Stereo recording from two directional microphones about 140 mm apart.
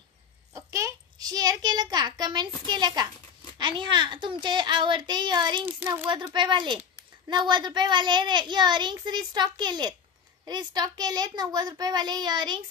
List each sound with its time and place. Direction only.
0.6 s a child's voice: 20° right (ahead or behind)